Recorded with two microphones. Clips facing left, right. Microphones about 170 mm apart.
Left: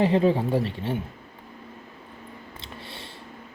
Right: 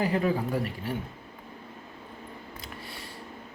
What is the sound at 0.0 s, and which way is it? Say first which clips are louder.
Speech: left 6 dB; 25° left (ahead or behind).